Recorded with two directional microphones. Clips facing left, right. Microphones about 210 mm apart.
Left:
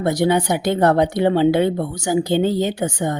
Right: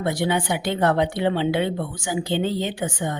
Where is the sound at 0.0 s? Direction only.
40° left (ahead or behind).